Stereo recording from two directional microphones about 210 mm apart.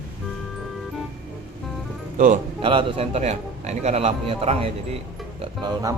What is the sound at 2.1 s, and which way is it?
Speech, 40° right (ahead or behind).